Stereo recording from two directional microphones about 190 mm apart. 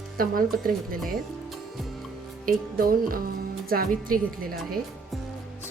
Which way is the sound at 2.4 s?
50° right (ahead or behind).